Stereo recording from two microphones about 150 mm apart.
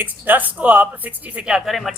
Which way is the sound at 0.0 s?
10° right (ahead or behind).